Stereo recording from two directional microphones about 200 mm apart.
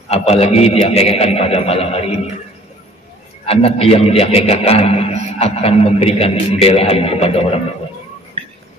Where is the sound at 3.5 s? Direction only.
30° left (ahead or behind).